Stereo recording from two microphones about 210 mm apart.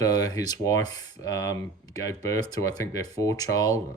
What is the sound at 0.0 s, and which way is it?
Speech, 15° left (ahead or behind).